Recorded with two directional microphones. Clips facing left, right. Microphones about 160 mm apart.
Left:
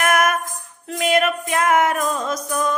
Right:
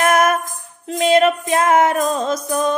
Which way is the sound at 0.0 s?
30° right (ahead or behind).